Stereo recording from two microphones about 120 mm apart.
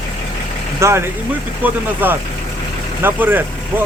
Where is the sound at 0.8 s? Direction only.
25° right (ahead or behind).